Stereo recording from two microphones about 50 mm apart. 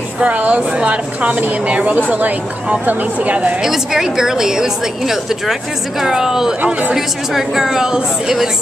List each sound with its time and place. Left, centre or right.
0.2 s speech: right
3.6 s a woman's voice: centre